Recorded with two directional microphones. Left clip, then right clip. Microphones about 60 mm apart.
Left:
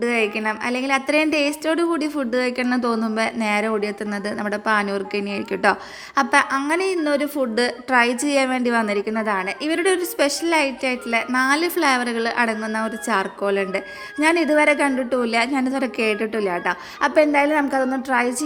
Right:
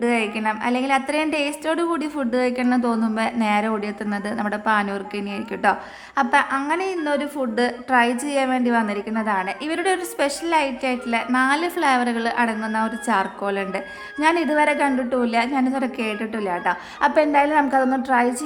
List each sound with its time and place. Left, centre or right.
0.0 s a woman's voice: left
1.9 s speech: centre
2.3 s speech: left
6.1 s a woman's voice: left
17.2 s a woman's voice: left
18.1 s speech: left